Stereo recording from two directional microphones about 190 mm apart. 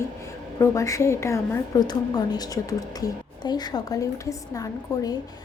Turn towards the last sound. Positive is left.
turn(degrees=20)  # may be behind; listen again after turning